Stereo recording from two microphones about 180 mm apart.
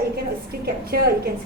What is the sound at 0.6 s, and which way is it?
Speech, 60° right (ahead or behind).